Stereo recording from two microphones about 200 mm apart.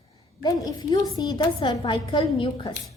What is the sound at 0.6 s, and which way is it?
A woman's voice, 20° left (ahead or behind).